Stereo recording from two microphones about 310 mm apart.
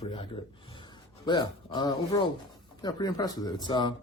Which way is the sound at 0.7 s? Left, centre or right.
Centre.